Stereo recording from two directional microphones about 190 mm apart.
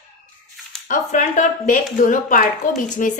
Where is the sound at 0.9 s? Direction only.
40° left (ahead or behind).